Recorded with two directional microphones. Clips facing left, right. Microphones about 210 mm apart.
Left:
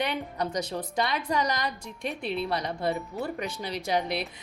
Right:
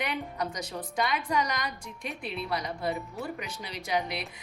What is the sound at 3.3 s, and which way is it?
Speech, 40° left (ahead or behind).